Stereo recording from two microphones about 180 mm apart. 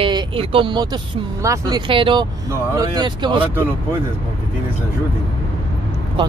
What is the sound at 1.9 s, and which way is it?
Speech, 30° right (ahead or behind).